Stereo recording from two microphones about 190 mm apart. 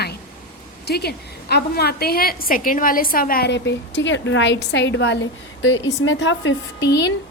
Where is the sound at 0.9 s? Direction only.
60° left (ahead or behind); by 6.6 s 80° left.